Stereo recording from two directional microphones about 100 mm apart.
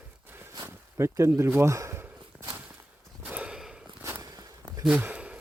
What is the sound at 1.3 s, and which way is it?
Speech, 25° right (ahead or behind).